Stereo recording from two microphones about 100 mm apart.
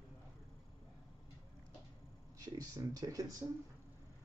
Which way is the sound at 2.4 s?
40° right (ahead or behind).